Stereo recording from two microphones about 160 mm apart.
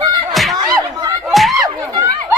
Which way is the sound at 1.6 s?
20° right (ahead or behind).